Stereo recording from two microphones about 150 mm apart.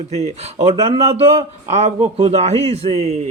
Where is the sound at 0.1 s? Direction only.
45° right (ahead or behind).